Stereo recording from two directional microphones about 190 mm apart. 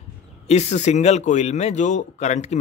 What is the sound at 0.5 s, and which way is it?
Speech, 35° left (ahead or behind).